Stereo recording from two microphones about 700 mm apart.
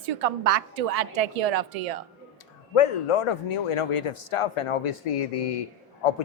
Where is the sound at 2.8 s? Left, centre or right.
Left.